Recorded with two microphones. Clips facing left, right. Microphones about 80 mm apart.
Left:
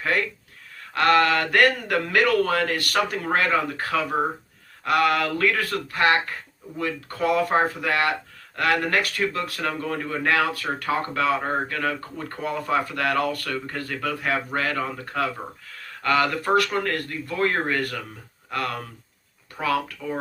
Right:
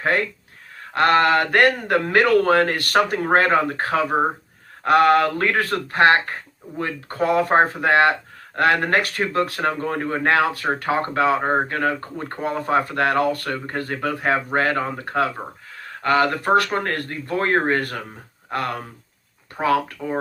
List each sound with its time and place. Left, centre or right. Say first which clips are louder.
0.0 s speech: right 3 dB; right